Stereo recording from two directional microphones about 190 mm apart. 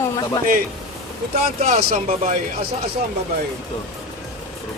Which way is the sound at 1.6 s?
40° right (ahead or behind).